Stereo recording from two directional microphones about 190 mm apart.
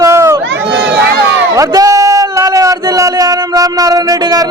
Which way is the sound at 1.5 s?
20° right (ahead or behind).